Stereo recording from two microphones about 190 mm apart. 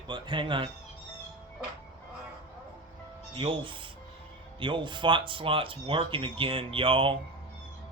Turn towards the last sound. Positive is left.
turn(degrees=-30)  # may be behind; listen again after turning